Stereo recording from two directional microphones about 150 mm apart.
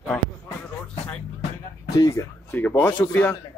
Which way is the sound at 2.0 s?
25° left (ahead or behind).